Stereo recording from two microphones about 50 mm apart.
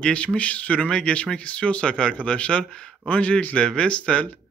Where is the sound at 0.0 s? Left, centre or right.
Left.